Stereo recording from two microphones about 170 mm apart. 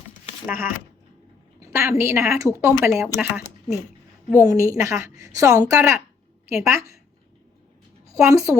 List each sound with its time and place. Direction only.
0.4 s a woman's voice: 15° right (ahead or behind)
1.7 s a woman's voice: 15° right (ahead or behind)
8.0 s a child's voice: 20° right (ahead or behind)